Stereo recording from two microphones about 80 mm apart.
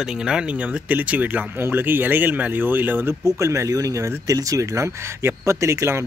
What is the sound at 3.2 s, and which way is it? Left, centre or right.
Speech, right.